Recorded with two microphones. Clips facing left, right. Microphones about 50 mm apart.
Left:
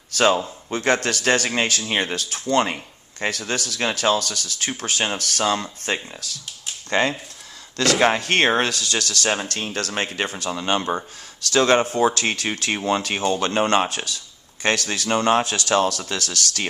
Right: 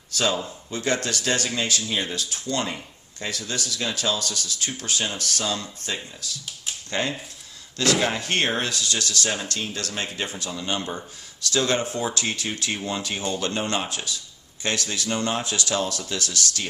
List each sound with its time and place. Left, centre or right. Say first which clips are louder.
0.7 s speech: left 5 dB; left
7.0 s speech: left 6 dB; left
7.8 s speech: left 4 dB; left